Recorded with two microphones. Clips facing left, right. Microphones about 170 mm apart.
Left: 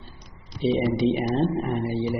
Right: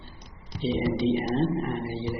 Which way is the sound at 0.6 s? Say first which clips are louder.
Left 4 dB; 15° left (ahead or behind).